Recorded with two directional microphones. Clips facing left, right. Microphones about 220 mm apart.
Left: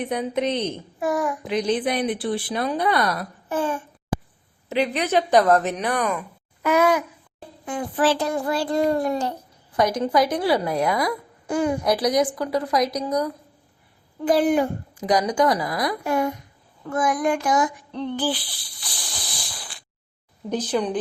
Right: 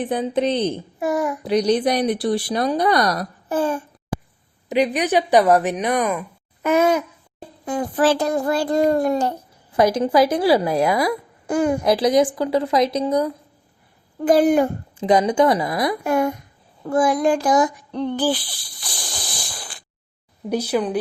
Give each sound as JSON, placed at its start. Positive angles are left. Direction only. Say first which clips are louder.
{"t": 0.0, "sound": "a woman's voice", "louder": "right 3 dB", "side_deg": -30}
{"t": 1.5, "sound": "speech", "louder": "right 6 dB", "side_deg": -40}
{"t": 4.7, "sound": "a woman's voice", "louder": "right 3 dB", "side_deg": -15}
{"t": 7.6, "sound": "a child's voice", "louder": "right 3 dB", "side_deg": -40}
{"t": 9.7, "sound": "a woman's voice", "louder": "right 4 dB", "side_deg": -30}
{"t": 11.4, "sound": "a child's voice", "louder": "right 3 dB", "side_deg": -50}
{"t": 11.8, "sound": "a woman's voice", "louder": "right 4 dB", "side_deg": -25}
{"t": 14.2, "sound": "a child's voice", "louder": "right 4 dB", "side_deg": -45}
{"t": 14.9, "sound": "a woman's voice", "louder": "right 4 dB", "side_deg": -25}
{"t": 16.0, "sound": "a child's voice", "louder": "right 3 dB", "side_deg": -50}
{"t": 16.8, "sound": "child singing", "louder": "right 5 dB", "side_deg": -30}
{"t": 20.5, "sound": "a woman's voice", "louder": "right 3 dB", "side_deg": -10}